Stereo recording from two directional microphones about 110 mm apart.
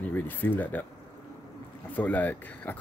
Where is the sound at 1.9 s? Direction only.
15° left (ahead or behind).